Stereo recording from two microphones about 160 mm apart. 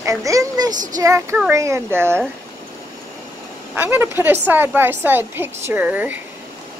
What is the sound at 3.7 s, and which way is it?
A woman's voice, 10° right (ahead or behind).